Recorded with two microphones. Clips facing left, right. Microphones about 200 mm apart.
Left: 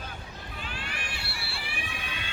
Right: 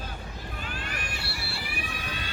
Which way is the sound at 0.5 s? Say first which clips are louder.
Right 1 dB; 45° right (ahead or behind).